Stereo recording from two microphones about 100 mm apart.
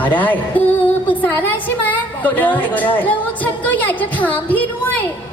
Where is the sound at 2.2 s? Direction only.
15° left (ahead or behind).